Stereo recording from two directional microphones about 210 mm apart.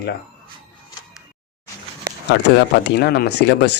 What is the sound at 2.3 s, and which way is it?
Speech, 55° left (ahead or behind).